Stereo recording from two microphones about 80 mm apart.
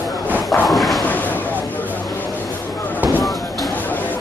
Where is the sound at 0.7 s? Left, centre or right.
Centre.